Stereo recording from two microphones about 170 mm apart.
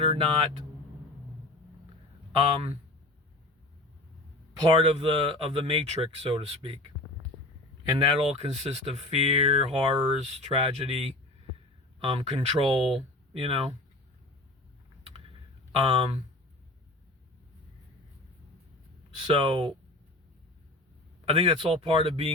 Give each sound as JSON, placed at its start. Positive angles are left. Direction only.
{"t": 0.0, "sound": "speech", "side_deg": -35}
{"t": 4.6, "sound": "speech", "side_deg": -30}
{"t": 7.9, "sound": "speech", "side_deg": -30}
{"t": 15.7, "sound": "speech", "side_deg": -35}
{"t": 19.3, "sound": "speech", "side_deg": -30}
{"t": 21.2, "sound": "speech", "side_deg": -35}